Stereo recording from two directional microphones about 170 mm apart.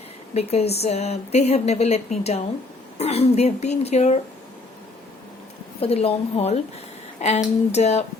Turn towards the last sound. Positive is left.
turn(degrees=40)  # may be behind; listen again after turning